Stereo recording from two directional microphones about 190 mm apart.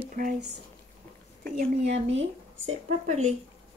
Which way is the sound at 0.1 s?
45° right (ahead or behind).